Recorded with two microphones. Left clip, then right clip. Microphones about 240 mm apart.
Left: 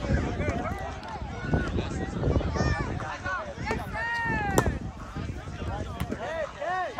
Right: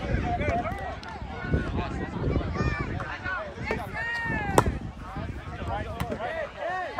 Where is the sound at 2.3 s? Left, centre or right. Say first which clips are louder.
Left 2 dB; left.